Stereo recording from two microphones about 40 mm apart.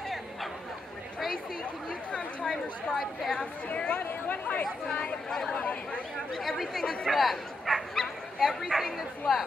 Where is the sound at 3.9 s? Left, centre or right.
Left.